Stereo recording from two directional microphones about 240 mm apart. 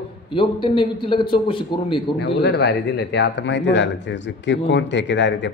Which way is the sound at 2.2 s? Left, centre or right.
Left.